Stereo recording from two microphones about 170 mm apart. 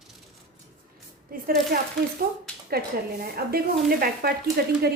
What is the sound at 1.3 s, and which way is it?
A woman's voice, 60° right (ahead or behind).